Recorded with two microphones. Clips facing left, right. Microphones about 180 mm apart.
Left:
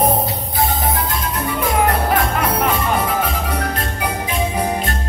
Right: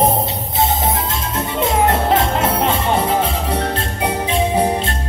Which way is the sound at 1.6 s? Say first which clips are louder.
Right 2 dB; 25° right (ahead or behind).